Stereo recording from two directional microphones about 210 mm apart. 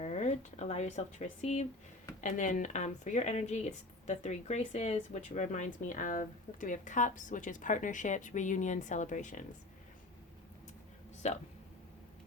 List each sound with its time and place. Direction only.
0.0 s a woman's voice: 35° left (ahead or behind)
11.2 s a woman's voice: 35° left (ahead or behind)